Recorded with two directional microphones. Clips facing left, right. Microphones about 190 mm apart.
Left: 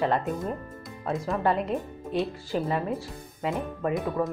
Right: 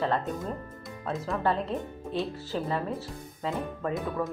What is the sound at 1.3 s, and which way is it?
Speech, 15° left (ahead or behind).